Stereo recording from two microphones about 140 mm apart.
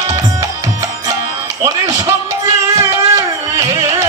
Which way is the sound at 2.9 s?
20° right (ahead or behind).